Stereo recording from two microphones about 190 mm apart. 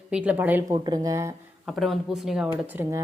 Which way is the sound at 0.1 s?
5° right (ahead or behind).